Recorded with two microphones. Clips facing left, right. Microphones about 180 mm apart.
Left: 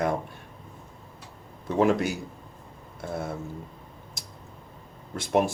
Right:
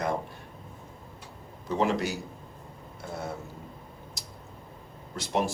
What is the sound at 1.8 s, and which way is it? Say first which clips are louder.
Speech: left 4 dB; 55° left (ahead or behind).